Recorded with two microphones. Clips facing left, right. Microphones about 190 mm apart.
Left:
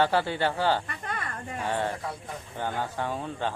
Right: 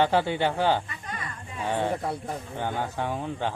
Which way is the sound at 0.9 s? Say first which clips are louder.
Left 2 dB; 60° left (ahead or behind).